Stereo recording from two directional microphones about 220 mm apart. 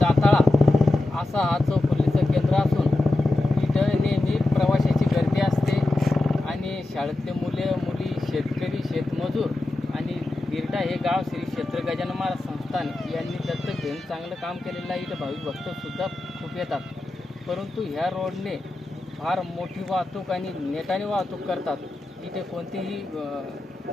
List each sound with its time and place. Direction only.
0.0 s vehicle: centre (ahead or behind)
16.6 s vehicle: centre (ahead or behind)
17.5 s speech: centre (ahead or behind)